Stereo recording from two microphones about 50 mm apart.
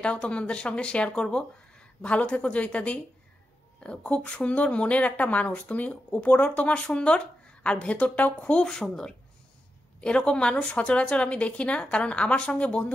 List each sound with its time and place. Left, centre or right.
0.0 s speech: left
8.5 s speech: centre